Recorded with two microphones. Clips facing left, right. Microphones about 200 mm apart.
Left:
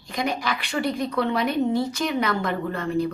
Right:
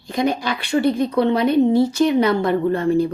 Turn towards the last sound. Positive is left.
turn(degrees=-35)  # may be behind; listen again after turning